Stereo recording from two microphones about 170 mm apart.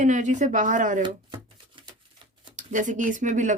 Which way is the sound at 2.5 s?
45° right (ahead or behind).